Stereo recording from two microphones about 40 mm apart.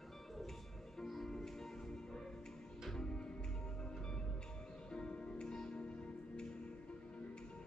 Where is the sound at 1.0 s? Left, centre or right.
Centre.